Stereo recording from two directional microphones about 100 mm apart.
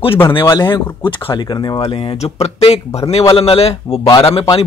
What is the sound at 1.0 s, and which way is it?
Speech, 55° left (ahead or behind).